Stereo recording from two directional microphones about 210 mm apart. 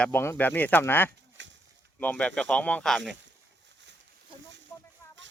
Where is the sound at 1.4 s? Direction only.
60° right (ahead or behind).